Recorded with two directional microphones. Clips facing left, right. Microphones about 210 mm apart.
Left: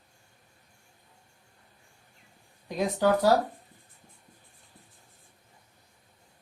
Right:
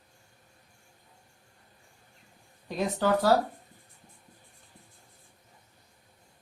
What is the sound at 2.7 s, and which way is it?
Speech, 15° left (ahead or behind).